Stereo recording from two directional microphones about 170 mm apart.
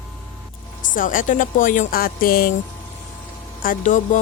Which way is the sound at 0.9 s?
50° left (ahead or behind).